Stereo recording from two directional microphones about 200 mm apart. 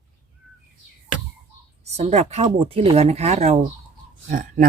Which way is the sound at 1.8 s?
30° right (ahead or behind).